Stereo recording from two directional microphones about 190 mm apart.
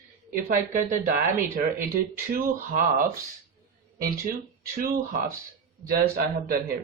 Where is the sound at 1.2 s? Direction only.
50° right (ahead or behind).